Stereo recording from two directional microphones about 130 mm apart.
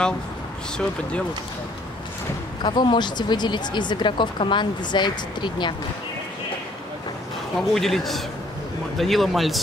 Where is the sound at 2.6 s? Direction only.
35° left (ahead or behind).